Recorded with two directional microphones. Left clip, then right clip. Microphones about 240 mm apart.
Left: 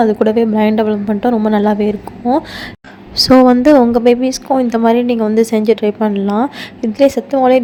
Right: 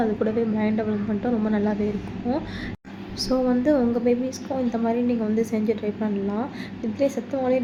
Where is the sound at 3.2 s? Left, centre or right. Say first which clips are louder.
Left 14 dB; left.